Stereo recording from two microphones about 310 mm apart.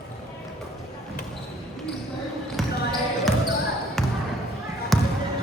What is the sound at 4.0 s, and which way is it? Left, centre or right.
Basketball bounce, centre.